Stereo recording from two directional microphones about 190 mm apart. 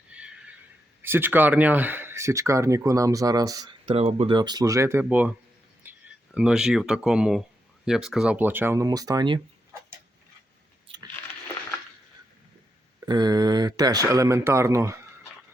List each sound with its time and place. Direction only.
0.1 s neigh: 5° right (ahead or behind)
1.0 s speech: 10° right (ahead or behind)
5.8 s a sound: 10° right (ahead or behind)
6.3 s speech: 5° right (ahead or behind); by 9.4 s 25° right (ahead or behind)
13.1 s speech: 20° right (ahead or behind)